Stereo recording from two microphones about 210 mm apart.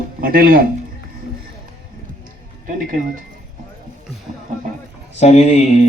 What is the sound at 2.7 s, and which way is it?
Speech, 40° right (ahead or behind).